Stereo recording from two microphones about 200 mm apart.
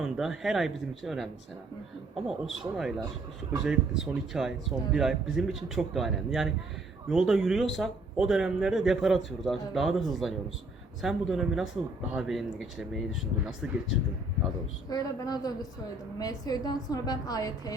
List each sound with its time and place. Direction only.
0.0 s speech: centre (ahead or behind)
14.8 s a woman's voice: 20° left (ahead or behind)